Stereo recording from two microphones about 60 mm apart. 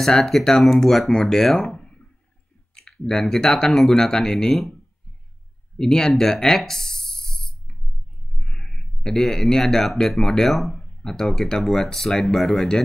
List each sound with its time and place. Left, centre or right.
0.0 s speech: centre
5.8 s a sound: centre
8.4 s speech: centre